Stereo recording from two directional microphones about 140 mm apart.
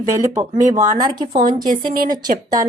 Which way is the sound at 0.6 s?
65° right (ahead or behind).